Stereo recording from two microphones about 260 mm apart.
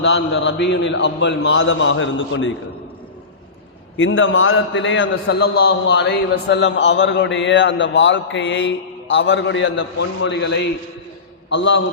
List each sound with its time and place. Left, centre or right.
0.0 s a man's voice: left
3.9 s a man's voice: left